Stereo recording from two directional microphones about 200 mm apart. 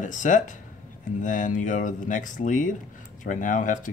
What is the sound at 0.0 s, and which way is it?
Speech, 40° left (ahead or behind).